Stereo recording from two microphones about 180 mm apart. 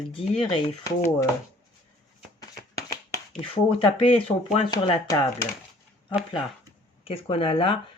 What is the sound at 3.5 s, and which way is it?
Speech, 30° left (ahead or behind).